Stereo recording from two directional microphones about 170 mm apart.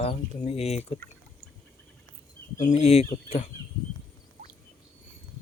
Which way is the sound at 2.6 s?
45° left (ahead or behind).